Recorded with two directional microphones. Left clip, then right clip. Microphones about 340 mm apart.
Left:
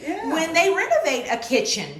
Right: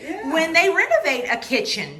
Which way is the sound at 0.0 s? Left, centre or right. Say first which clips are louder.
Right 2 dB; centre.